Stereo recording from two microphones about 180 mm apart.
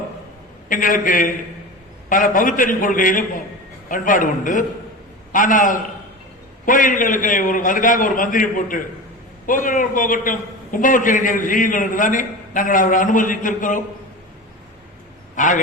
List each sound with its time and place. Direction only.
0.7 s a man's voice: 50° left (ahead or behind)
15.4 s a man's voice: 45° left (ahead or behind)